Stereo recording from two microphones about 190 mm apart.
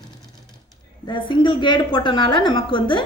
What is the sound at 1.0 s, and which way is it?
A woman's voice, 25° left (ahead or behind).